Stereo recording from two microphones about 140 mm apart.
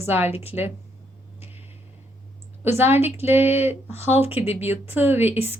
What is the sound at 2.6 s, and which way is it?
A woman's voice, 15° right (ahead or behind).